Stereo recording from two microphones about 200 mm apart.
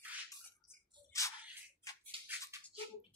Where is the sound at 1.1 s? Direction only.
15° left (ahead or behind).